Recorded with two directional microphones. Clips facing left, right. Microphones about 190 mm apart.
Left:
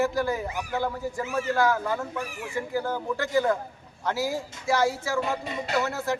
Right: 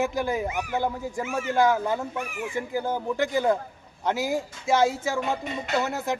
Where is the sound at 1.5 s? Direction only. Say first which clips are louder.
Right 4 dB; 20° right (ahead or behind).